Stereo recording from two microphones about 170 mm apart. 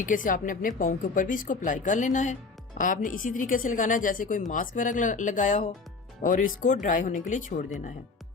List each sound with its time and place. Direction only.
0.0 s a woman's voice: 50° left (ahead or behind)